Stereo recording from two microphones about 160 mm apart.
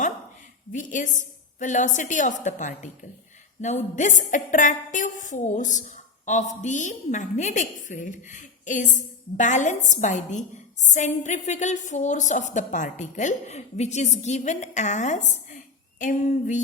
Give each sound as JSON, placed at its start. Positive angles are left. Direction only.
{"t": 0.7, "sound": "a woman's voice", "side_deg": 50}